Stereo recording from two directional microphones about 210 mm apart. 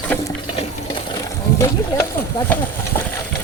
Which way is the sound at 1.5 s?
15° left (ahead or behind).